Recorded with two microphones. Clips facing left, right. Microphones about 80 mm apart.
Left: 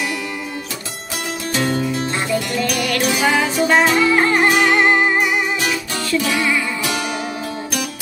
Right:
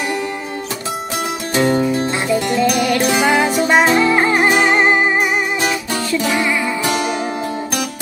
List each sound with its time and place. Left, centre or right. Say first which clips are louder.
1.5 s music: right 5 dB; right